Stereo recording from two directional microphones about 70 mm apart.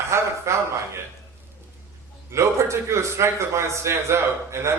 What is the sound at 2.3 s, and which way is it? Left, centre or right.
A man's voice, right.